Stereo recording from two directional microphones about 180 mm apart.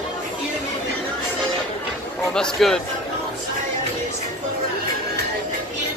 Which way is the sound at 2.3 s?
5° left (ahead or behind).